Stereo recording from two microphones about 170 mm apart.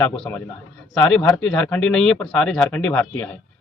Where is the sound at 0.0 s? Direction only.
10° left (ahead or behind).